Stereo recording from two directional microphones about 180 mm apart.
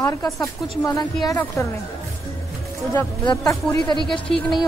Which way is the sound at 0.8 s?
20° left (ahead or behind).